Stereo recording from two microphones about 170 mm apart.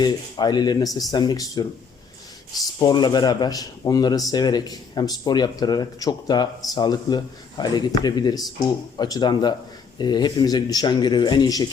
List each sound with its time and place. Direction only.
0.0 s speech: 25° left (ahead or behind)
2.7 s speech: 25° left (ahead or behind)